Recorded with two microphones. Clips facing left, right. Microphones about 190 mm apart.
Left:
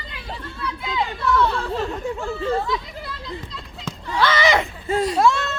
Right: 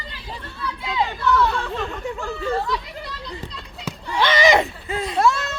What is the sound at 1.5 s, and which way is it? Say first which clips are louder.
Speech: left 1 dB; 35° left (ahead or behind).